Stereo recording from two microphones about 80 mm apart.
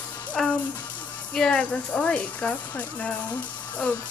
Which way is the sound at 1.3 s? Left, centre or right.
Centre.